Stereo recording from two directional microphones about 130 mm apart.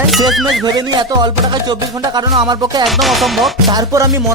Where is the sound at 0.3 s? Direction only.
Centre (ahead or behind).